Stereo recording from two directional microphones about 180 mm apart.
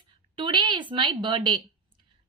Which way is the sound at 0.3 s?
25° right (ahead or behind).